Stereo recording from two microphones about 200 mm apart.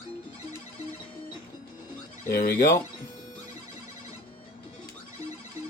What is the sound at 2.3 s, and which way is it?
Speech, 50° left (ahead or behind).